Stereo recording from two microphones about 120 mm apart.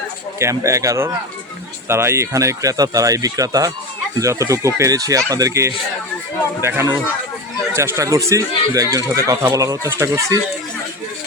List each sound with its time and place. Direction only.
0.3 s speech: 25° right (ahead or behind)